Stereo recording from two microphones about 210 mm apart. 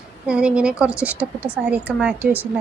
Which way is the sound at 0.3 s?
5° right (ahead or behind).